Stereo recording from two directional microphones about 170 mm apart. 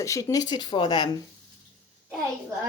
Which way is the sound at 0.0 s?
20° left (ahead or behind).